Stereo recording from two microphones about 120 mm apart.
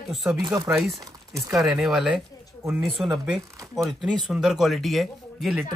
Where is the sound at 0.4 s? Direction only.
35° right (ahead or behind).